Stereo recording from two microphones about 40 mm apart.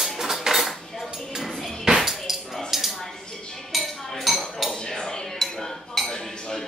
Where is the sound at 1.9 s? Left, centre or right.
Centre.